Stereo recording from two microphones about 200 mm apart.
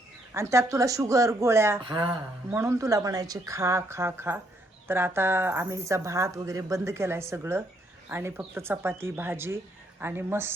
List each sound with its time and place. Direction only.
0.3 s speech: 15° right (ahead or behind)